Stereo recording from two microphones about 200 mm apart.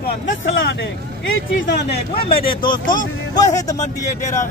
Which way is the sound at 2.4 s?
25° left (ahead or behind).